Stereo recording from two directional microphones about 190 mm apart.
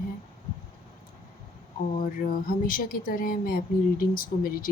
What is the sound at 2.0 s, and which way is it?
Speech, 45° left (ahead or behind).